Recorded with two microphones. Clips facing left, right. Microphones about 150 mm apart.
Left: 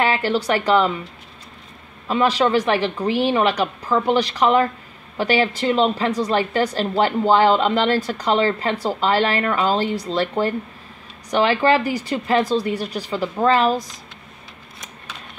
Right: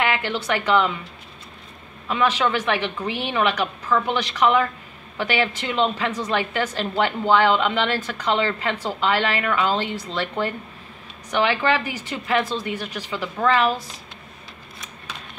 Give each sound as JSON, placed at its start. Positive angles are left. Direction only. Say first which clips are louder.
{"t": 0.0, "sound": "speech", "louder": "left 4 dB", "side_deg": 40}
{"t": 2.0, "sound": "speech", "louder": "left 3 dB", "side_deg": 35}